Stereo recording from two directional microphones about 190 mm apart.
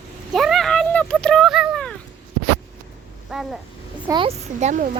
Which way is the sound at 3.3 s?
Centre (ahead or behind).